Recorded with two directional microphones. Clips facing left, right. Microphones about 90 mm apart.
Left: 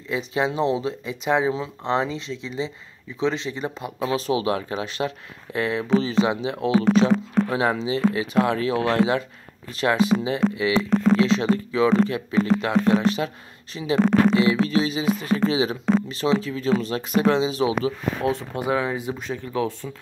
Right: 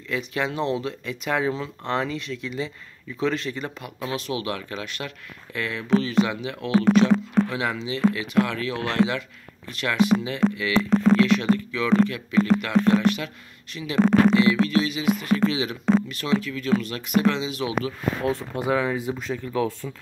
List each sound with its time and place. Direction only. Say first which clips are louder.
0.1 s speech: left 3 dB; 25° left (ahead or behind)